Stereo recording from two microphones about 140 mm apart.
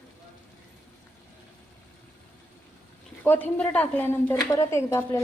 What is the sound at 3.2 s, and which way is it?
A woman's voice, 15° left (ahead or behind).